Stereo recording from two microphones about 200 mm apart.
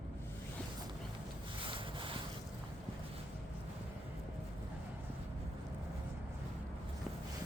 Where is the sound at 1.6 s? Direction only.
25° right (ahead or behind).